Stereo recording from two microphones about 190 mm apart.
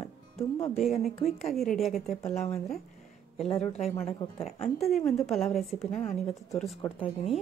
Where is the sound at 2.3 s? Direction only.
35° left (ahead or behind).